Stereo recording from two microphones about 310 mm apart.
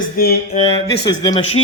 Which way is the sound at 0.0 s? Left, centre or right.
Left.